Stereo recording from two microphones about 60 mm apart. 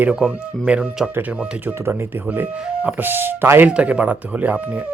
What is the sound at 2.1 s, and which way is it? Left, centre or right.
Speech, right.